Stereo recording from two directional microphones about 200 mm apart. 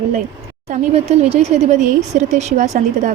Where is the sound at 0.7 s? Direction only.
30° right (ahead or behind).